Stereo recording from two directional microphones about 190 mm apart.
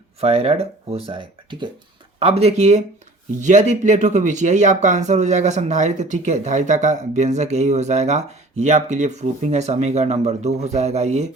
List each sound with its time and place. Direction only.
0.2 s speech: 30° right (ahead or behind)